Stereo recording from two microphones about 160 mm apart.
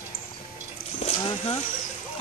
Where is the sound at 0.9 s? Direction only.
35° left (ahead or behind).